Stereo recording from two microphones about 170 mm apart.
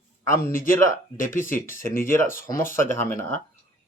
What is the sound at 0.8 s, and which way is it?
Speech, 15° left (ahead or behind).